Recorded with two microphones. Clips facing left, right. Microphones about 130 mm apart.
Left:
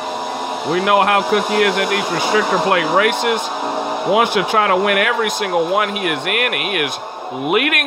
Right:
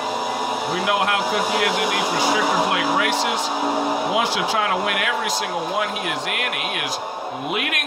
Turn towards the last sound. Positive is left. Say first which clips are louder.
# left 8 dB
turn(degrees=65)  # may be behind; listen again after turning